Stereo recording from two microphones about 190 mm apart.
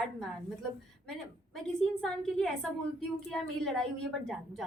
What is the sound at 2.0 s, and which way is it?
A woman's voice, centre (ahead or behind).